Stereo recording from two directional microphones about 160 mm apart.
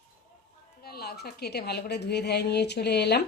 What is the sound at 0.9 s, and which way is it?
A woman's voice, 75° left (ahead or behind).